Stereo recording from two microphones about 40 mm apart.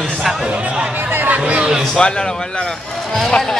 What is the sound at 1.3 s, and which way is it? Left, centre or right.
Speech, right.